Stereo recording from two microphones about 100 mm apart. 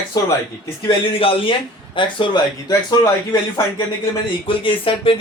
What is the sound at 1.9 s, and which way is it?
Music, 55° left (ahead or behind).